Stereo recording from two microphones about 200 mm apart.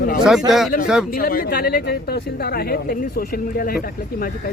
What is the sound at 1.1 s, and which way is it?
Speech, 45° left (ahead or behind).